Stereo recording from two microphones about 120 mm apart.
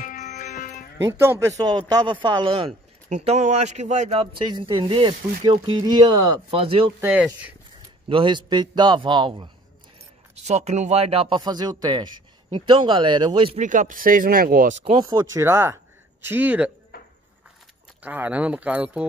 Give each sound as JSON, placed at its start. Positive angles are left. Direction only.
{"t": 0.0, "sound": "music", "side_deg": 90}
{"t": 0.9, "sound": "speech", "side_deg": -20}
{"t": 3.1, "sound": "speech", "side_deg": -70}
{"t": 4.2, "sound": "speech", "side_deg": -40}
{"t": 6.5, "sound": "speech", "side_deg": -50}
{"t": 7.0, "sound": "speech", "side_deg": -10}
{"t": 8.1, "sound": "speech", "side_deg": -45}
{"t": 10.4, "sound": "speech", "side_deg": -65}
{"t": 13.6, "sound": "speech", "side_deg": -90}
{"t": 15.0, "sound": "speech", "side_deg": -25}
{"t": 18.0, "sound": "speech", "side_deg": -15}